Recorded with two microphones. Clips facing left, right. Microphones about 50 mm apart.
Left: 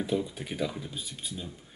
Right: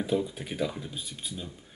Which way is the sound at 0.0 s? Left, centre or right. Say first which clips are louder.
Right 2 dB; centre.